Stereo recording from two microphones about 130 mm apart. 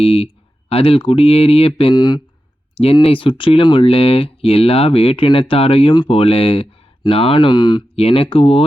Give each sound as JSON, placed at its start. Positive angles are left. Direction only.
{"t": 0.0, "sound": "speech", "side_deg": 45}
{"t": 2.0, "sound": "speech", "side_deg": 35}
{"t": 2.7, "sound": "speech", "side_deg": 50}
{"t": 7.9, "sound": "speech", "side_deg": 50}